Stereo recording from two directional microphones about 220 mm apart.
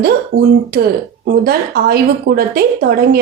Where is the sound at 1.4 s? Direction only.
45° right (ahead or behind).